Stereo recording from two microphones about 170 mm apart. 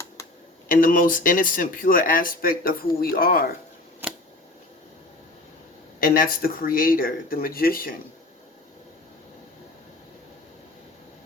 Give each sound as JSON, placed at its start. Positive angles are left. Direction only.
{"t": 0.7, "sound": "speech", "side_deg": 55}
{"t": 4.0, "sound": "a sound", "side_deg": -10}
{"t": 6.0, "sound": "speech", "side_deg": 60}